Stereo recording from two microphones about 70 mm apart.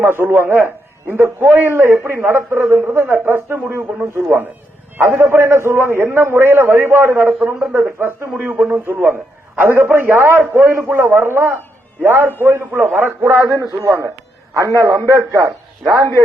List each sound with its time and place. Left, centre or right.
0.0 s a man's voice: right
7.9 s a man's voice: right
8.4 s a man's voice: right
13.7 s a man's voice: right